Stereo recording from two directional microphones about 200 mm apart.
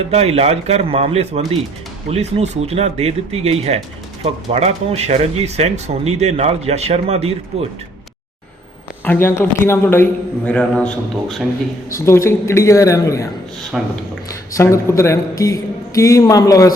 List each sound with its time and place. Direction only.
0.1 s speech: 30° right (ahead or behind)
9.0 s a man's voice: 10° left (ahead or behind)
13.7 s a man's voice: centre (ahead or behind)
14.3 s a man's voice: 15° left (ahead or behind)